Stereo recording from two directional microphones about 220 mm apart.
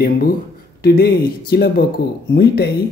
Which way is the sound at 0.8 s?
45° left (ahead or behind).